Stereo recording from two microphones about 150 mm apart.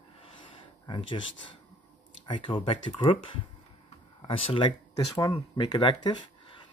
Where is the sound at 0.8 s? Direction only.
30° left (ahead or behind).